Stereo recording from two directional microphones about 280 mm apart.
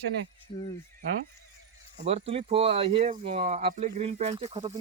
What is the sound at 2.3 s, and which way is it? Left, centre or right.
Speech, centre.